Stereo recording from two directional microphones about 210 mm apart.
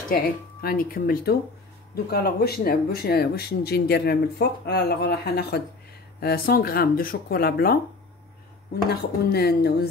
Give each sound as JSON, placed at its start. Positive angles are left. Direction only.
{"t": 0.1, "sound": "speech", "side_deg": 45}
{"t": 8.9, "sound": "speech", "side_deg": 50}